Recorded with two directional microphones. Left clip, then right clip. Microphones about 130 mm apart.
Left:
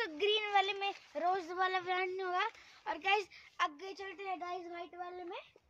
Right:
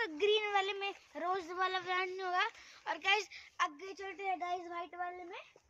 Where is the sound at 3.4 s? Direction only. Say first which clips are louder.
Even; 40° left (ahead or behind).